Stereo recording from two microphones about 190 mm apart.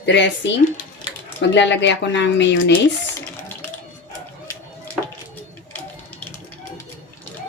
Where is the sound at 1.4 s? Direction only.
70° left (ahead or behind).